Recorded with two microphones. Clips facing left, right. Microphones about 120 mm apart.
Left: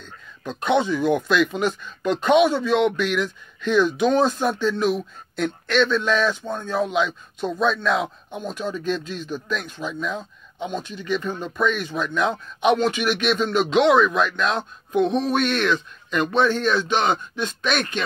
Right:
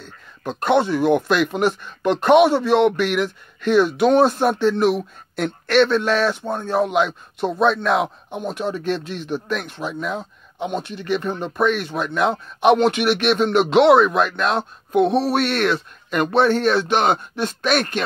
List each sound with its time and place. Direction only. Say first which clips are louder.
0.4 s speech: right 3 dB; 55° right (ahead or behind)
14.9 s a sound: right 3 dB; 55° right (ahead or behind)
15.3 s speech: right 2 dB; 55° right (ahead or behind)